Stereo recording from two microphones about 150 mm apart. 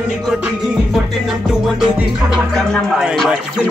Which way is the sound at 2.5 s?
Centre (ahead or behind).